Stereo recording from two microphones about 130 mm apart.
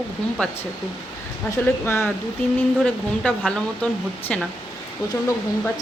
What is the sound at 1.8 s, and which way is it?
Speech, 20° left (ahead or behind).